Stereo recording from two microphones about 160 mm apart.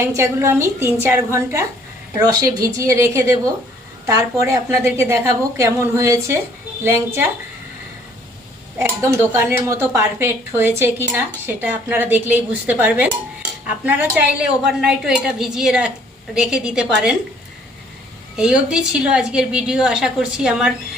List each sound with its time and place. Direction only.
0.0 s a woman's voice: 15° right (ahead or behind)
8.8 s a woman's voice: 15° right (ahead or behind)
18.3 s a woman's voice: 5° right (ahead or behind)